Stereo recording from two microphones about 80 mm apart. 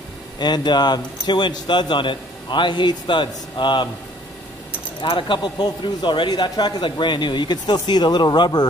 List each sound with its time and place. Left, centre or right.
0.4 s speech: left
5.0 s speech: left